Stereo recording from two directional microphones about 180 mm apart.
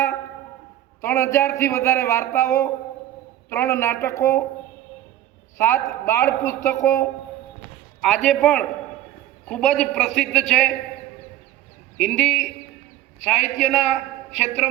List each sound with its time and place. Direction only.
1.0 s a man's voice: 15° left (ahead or behind)
5.5 s a man's voice: 15° left (ahead or behind)
8.0 s a man's voice: centre (ahead or behind)
11.9 s a man's voice: 5° left (ahead or behind)
13.1 s a man's voice: 40° left (ahead or behind)